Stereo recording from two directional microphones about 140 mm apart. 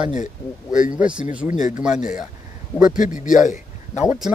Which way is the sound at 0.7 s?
70° left (ahead or behind).